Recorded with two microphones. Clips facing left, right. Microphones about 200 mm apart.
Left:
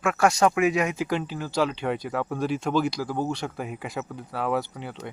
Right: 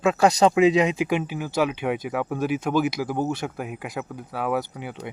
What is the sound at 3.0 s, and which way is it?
Speech, 15° right (ahead or behind).